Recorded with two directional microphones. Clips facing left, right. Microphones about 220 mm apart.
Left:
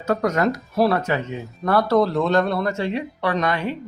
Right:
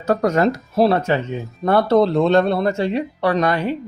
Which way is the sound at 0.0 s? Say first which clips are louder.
Right 3 dB; 35° right (ahead or behind).